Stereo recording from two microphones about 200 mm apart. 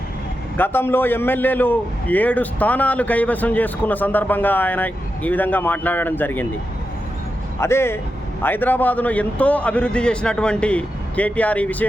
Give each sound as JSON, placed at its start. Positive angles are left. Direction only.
{"t": 0.5, "sound": "a man's voice", "side_deg": 10}
{"t": 7.6, "sound": "a man's voice", "side_deg": 10}